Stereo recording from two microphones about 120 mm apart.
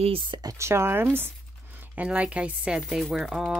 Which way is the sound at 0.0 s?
45° right (ahead or behind).